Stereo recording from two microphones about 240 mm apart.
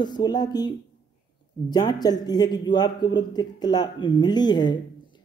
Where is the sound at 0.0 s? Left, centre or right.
Centre.